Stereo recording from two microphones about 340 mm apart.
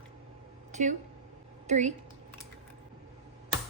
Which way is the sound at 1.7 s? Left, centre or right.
Centre.